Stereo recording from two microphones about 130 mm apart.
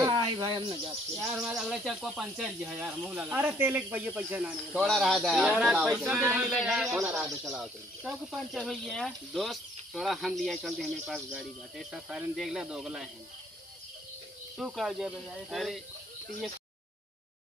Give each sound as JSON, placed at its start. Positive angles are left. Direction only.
{"t": 0.0, "sound": "cricket", "side_deg": -30}
{"t": 1.3, "sound": "speech", "side_deg": -5}
{"t": 4.8, "sound": "speech", "side_deg": 0}
{"t": 14.6, "sound": "speech", "side_deg": 0}